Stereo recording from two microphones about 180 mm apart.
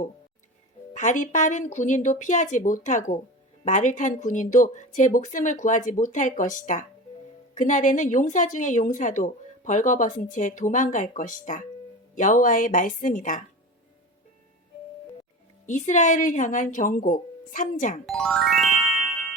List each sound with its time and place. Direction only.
0.9 s a woman's voice: 45° left (ahead or behind)
15.6 s a woman's voice: 45° left (ahead or behind)
18.0 s speech: centre (ahead or behind)